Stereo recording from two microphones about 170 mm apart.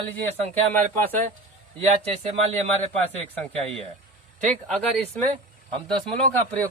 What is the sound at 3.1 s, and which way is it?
Speech, 35° right (ahead or behind).